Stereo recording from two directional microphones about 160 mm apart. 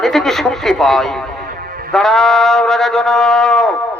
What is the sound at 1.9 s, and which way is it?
Music, centre (ahead or behind).